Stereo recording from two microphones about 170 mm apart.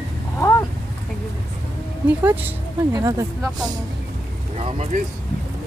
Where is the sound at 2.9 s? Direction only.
20° right (ahead or behind).